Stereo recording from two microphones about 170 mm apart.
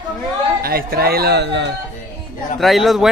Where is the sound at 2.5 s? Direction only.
Centre (ahead or behind).